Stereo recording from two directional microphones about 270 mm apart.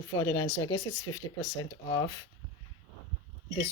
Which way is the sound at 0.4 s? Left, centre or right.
Left.